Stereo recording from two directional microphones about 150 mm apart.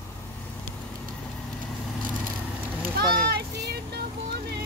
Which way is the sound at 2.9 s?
90° right.